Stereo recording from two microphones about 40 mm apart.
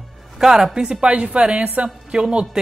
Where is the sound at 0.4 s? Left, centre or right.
Centre.